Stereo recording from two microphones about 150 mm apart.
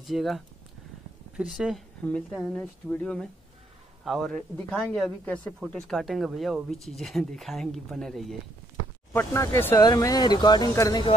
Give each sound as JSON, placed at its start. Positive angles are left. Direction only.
{"t": 0.0, "sound": "speech", "side_deg": 0}
{"t": 9.1, "sound": "speech", "side_deg": 20}